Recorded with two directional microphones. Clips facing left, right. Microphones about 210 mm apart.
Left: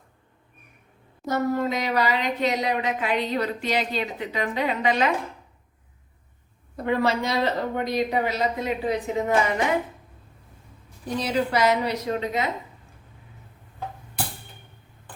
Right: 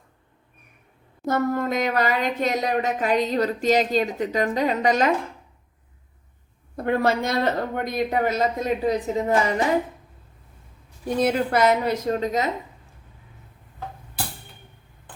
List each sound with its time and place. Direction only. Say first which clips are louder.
1.2 s speech: right 1 dB; 50° right (ahead or behind)
6.8 s speech: right 2 dB; 50° right (ahead or behind)
11.2 s speech: right 3 dB; 50° right (ahead or behind)